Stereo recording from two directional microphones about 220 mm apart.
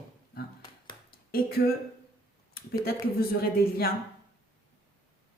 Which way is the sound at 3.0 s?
45° left (ahead or behind).